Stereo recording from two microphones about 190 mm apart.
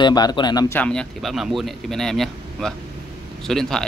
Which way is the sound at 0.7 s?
5° left (ahead or behind).